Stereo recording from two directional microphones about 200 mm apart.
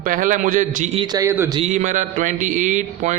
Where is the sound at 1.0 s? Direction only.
20° right (ahead or behind).